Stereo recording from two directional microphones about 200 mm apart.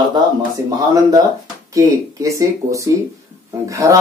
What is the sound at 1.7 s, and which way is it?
Speech, 15° right (ahead or behind).